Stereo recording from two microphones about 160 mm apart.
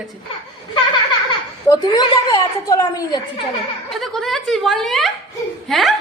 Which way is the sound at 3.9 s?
Centre (ahead or behind).